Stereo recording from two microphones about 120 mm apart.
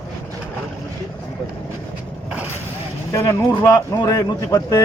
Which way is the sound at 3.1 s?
25° left (ahead or behind).